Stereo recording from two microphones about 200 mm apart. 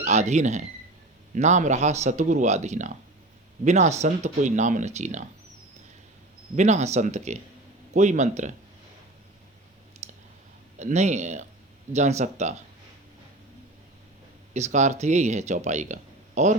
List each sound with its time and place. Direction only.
0.0 s speech: 35° right (ahead or behind)
6.6 s speech: 35° right (ahead or behind)
10.0 s clicking: 35° right (ahead or behind)
10.8 s speech: 35° right (ahead or behind)
14.5 s speech: 35° right (ahead or behind)